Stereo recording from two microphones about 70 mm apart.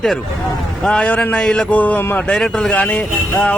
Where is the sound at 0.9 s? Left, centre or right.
Centre.